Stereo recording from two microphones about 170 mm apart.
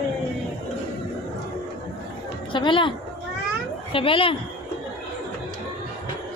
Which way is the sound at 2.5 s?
30° left (ahead or behind).